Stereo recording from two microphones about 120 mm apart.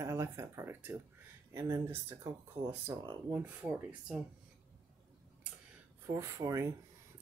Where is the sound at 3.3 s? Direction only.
15° right (ahead or behind).